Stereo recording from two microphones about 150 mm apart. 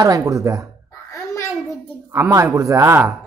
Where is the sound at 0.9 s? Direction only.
20° left (ahead or behind).